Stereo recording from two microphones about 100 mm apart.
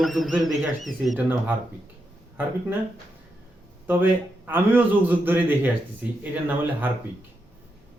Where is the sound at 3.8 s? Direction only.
20° right (ahead or behind).